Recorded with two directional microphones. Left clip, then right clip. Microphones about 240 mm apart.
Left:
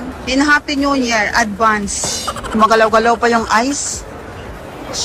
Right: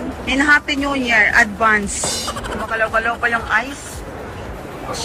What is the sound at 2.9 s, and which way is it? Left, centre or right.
Speech, left.